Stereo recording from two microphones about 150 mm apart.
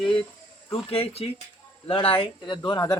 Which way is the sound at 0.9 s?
40° left (ahead or behind).